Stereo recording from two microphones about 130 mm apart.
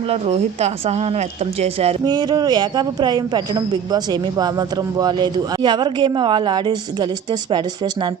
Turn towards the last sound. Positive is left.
turn(degrees=-35)  # may be behind; listen again after turning